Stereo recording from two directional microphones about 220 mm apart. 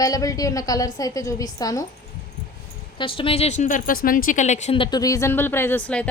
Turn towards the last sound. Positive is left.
turn(degrees=5)  # may be behind; listen again after turning